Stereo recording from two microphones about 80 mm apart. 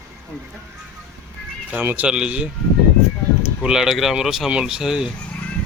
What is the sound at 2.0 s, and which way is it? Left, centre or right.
Speech, centre.